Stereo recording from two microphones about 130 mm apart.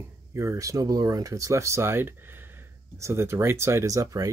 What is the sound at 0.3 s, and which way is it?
Speech, 20° right (ahead or behind).